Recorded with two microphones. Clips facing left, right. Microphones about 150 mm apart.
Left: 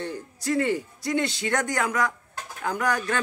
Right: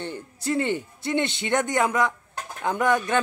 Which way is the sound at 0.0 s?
30° right (ahead or behind).